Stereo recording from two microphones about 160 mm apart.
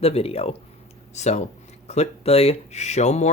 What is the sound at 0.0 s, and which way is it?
Speech, 40° left (ahead or behind).